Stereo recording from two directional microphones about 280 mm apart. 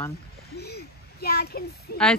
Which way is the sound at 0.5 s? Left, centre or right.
Left.